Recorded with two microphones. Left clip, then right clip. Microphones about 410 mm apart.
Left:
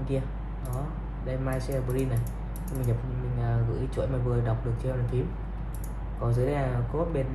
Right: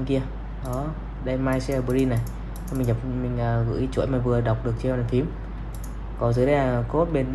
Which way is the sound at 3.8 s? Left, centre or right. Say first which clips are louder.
Right 7 dB; centre.